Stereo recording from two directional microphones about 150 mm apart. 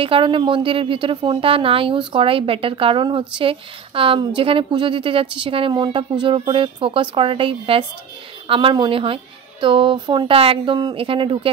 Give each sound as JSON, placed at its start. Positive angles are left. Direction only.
{"t": 0.0, "sound": "a woman's voice", "side_deg": -35}